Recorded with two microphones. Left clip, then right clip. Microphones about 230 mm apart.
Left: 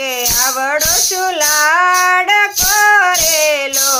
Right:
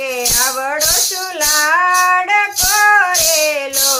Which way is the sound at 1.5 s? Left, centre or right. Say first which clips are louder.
Even; left.